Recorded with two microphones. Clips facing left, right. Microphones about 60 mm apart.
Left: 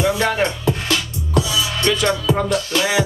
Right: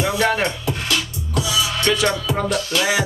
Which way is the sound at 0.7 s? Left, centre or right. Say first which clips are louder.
Left 3 dB; left.